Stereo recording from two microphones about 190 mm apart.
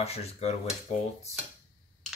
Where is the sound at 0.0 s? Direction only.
35° left (ahead or behind).